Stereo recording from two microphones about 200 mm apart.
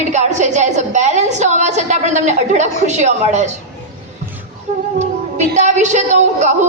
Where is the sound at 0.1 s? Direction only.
35° right (ahead or behind).